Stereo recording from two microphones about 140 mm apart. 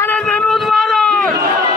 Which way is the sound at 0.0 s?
10° left (ahead or behind).